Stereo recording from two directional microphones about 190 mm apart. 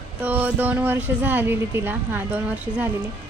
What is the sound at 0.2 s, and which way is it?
A woman's voice, 10° right (ahead or behind).